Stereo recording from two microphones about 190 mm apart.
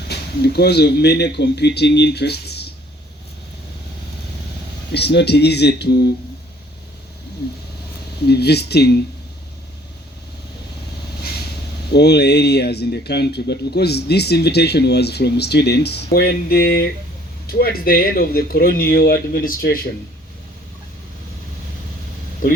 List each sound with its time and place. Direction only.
0.1 s speech: 60° left (ahead or behind)
4.9 s speech: 60° left (ahead or behind)
8.3 s speech: 60° left (ahead or behind)
11.9 s speech: 60° left (ahead or behind)